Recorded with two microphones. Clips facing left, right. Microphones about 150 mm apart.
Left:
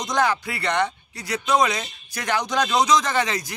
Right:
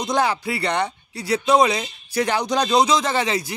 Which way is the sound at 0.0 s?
30° right (ahead or behind).